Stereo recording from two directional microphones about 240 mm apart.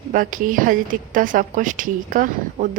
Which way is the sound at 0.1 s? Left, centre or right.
Right.